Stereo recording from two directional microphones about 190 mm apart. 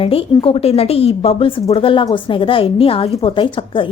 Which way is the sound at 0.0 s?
30° left (ahead or behind).